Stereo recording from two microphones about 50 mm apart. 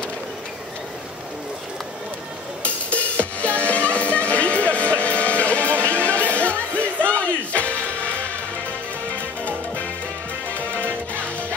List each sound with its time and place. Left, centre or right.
2.6 s music: left
10.5 s music: left